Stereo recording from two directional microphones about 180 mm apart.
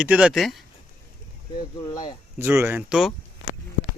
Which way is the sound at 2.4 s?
10° right (ahead or behind).